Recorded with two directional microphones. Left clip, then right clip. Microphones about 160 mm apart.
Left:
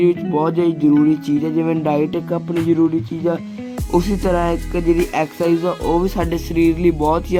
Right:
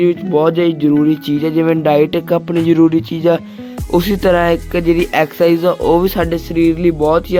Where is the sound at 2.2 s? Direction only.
40° right (ahead or behind).